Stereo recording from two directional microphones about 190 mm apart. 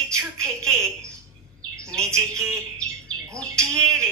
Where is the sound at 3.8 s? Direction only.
15° right (ahead or behind).